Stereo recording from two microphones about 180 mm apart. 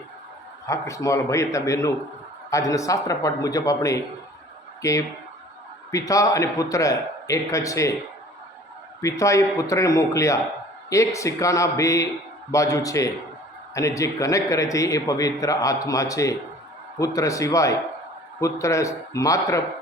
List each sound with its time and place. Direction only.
0.7 s a man's voice: 15° left (ahead or behind)
9.0 s a man's voice: 15° left (ahead or behind)